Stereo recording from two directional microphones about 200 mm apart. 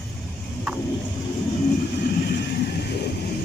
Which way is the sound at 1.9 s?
55° left (ahead or behind).